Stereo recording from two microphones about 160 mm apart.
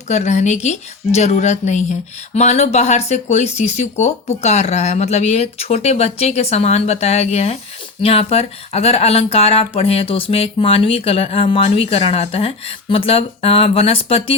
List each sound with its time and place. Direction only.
0.1 s a woman's voice: 45° left (ahead or behind)